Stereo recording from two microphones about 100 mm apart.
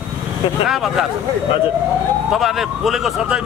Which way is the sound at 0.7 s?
5° right (ahead or behind).